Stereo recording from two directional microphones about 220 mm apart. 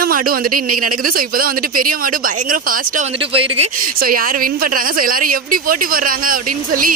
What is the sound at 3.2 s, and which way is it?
Speech, 25° right (ahead or behind).